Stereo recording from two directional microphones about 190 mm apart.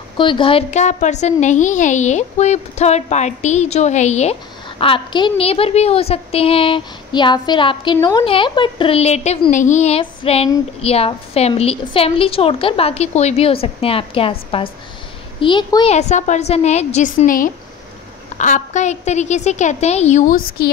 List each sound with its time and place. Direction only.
0.2 s a woman's voice: 25° left (ahead or behind); by 20.7 s 50° left (ahead or behind)